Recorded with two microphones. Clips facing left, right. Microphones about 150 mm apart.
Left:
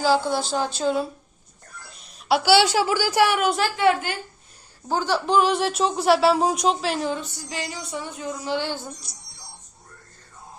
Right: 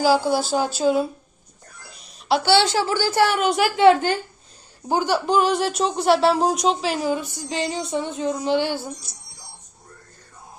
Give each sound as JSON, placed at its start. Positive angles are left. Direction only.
{"t": 0.0, "sound": "a woman's voice", "side_deg": -5}
{"t": 1.9, "sound": "a sound", "side_deg": 5}
{"t": 2.7, "sound": "speech", "side_deg": 10}
{"t": 3.4, "sound": "a woman's voice", "side_deg": 0}
{"t": 3.8, "sound": "a woman's voice", "side_deg": -30}
{"t": 4.9, "sound": "a woman's voice", "side_deg": -15}